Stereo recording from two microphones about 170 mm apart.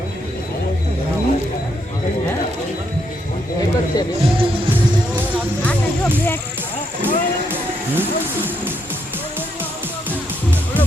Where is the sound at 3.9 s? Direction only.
20° left (ahead or behind).